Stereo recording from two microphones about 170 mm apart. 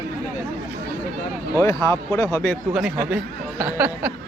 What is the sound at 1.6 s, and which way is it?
A man's voice, 20° left (ahead or behind).